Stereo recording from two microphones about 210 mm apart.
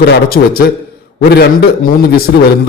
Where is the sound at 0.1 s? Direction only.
45° left (ahead or behind).